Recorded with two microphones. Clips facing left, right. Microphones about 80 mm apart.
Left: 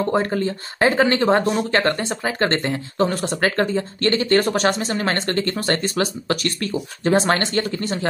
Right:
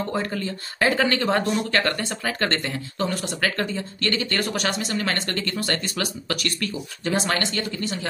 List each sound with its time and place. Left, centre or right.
0.1 s speech: left